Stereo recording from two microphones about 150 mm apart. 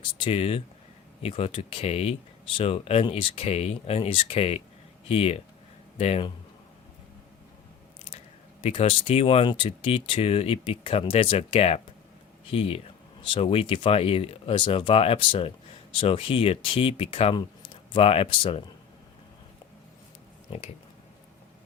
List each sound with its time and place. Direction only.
0.2 s speech: 40° left (ahead or behind)
8.6 s speech: 40° left (ahead or behind)